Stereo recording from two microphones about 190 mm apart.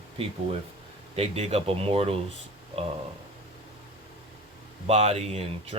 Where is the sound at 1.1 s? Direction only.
30° right (ahead or behind).